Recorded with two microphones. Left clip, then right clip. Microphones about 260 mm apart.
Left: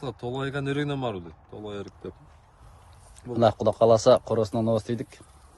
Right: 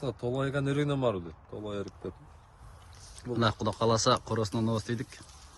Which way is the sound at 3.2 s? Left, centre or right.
Centre.